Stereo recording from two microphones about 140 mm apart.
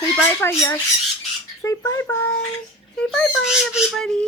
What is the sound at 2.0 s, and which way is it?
Speech, 15° left (ahead or behind).